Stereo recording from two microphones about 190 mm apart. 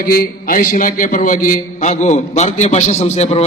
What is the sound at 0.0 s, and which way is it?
A man's voice, 50° left (ahead or behind).